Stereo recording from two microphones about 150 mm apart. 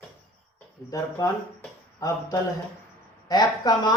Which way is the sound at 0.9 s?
25° left (ahead or behind).